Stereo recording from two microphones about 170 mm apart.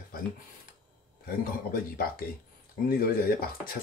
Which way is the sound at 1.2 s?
60° left (ahead or behind).